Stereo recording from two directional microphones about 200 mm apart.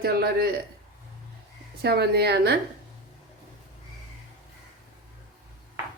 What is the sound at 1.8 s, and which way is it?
Speech, 55° right (ahead or behind).